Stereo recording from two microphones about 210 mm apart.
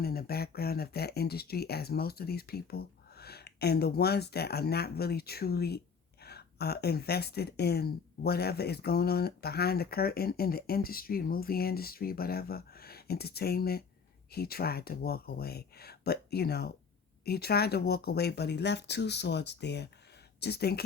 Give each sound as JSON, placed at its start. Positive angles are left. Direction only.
{"t": 0.0, "sound": "speech", "side_deg": 45}